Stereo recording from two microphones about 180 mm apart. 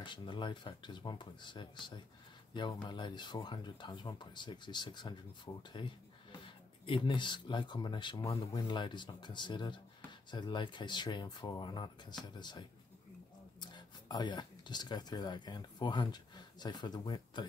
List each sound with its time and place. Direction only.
0.0 s speech: 25° left (ahead or behind)